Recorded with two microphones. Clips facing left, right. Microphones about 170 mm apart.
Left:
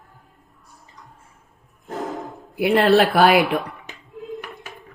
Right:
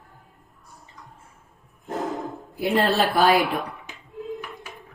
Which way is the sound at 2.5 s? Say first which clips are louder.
Left 6 dB; 70° left (ahead or behind).